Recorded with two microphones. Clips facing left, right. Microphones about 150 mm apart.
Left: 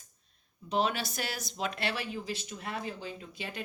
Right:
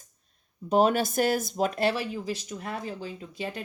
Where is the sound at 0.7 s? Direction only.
45° right (ahead or behind).